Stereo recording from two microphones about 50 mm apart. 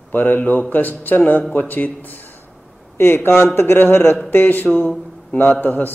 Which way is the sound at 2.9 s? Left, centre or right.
Left.